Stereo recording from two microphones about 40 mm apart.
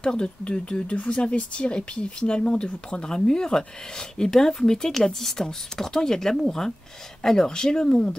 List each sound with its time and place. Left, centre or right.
0.0 s speech: left